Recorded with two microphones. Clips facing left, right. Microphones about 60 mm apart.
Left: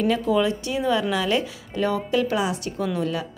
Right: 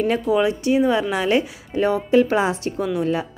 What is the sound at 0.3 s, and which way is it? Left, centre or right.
A woman's voice, right.